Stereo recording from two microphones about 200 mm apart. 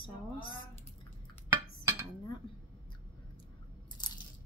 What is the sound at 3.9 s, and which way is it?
Crunch, 20° left (ahead or behind).